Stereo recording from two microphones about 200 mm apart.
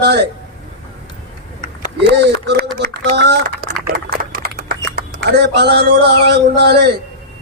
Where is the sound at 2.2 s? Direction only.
55° right (ahead or behind).